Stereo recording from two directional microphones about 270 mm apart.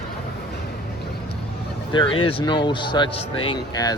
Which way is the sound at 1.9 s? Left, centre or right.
Centre.